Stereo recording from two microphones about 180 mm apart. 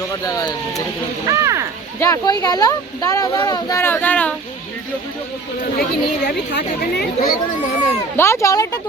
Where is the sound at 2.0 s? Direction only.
15° left (ahead or behind).